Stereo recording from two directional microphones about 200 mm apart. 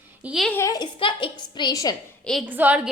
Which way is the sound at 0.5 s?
15° left (ahead or behind).